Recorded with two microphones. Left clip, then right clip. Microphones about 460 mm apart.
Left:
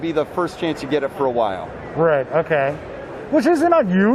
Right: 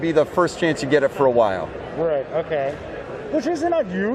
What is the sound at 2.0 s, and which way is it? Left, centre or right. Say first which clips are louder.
Speech: left 5 dB; left.